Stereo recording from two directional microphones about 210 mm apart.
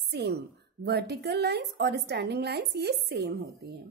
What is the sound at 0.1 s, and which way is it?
A woman's voice, 50° right (ahead or behind).